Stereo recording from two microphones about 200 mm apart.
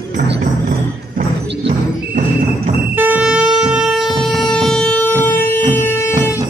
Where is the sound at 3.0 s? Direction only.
5° right (ahead or behind).